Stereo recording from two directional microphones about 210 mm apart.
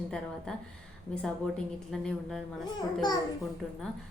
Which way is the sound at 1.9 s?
Centre (ahead or behind).